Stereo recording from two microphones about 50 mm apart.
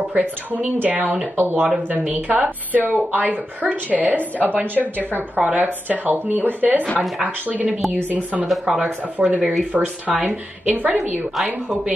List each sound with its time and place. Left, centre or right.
0.1 s speech: right
8.7 s speech: centre
9.5 s speech: right
11.0 s a woman's voice: centre